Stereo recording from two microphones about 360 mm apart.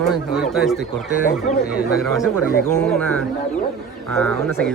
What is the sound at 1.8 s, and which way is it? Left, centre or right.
Speech, centre.